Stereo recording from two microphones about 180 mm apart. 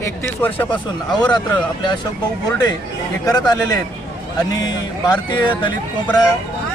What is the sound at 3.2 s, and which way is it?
Speech, 20° left (ahead or behind).